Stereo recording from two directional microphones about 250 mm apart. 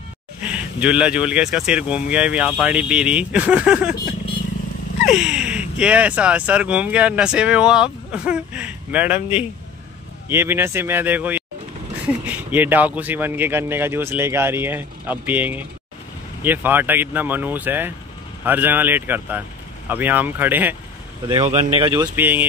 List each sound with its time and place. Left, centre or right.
0.4 s speech: centre
5.0 s speech: centre
21.4 s speech: right; by 22.4 s centre